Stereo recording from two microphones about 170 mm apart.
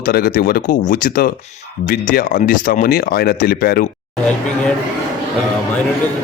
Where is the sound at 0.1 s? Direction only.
60° left (ahead or behind).